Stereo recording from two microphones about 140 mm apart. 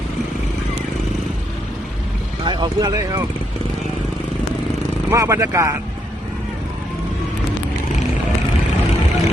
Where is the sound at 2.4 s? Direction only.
30° right (ahead or behind).